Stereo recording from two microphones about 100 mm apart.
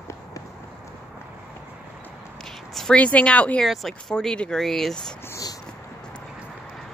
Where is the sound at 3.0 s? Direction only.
15° left (ahead or behind).